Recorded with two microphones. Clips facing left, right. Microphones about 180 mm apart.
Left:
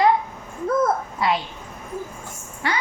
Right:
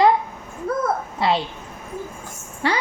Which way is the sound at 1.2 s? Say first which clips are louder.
Right 2 dB; 30° right (ahead or behind).